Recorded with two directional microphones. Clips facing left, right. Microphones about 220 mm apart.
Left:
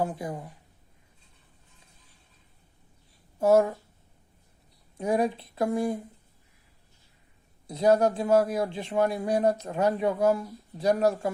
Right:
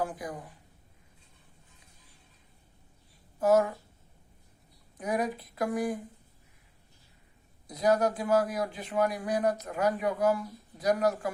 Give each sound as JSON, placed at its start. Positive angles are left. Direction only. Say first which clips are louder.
{"t": 0.0, "sound": "a man's voice", "louder": "left 4 dB", "side_deg": 25}
{"t": 3.4, "sound": "a man's voice", "louder": "left 3 dB", "side_deg": 30}
{"t": 4.9, "sound": "a man's voice", "louder": "left 5 dB", "side_deg": 30}
{"t": 7.7, "sound": "a man's voice", "louder": "left 4 dB", "side_deg": 30}